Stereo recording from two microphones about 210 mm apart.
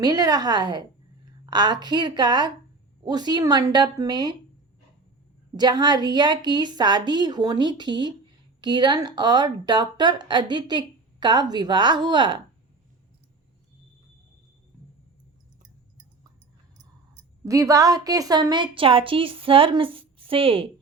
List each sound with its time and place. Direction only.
0.0 s speech: 20° right (ahead or behind)
5.5 s speech: 20° right (ahead or behind)
17.4 s speech: 15° right (ahead or behind)